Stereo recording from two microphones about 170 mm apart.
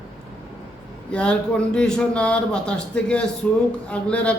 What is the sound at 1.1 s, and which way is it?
Speech, 5° left (ahead or behind).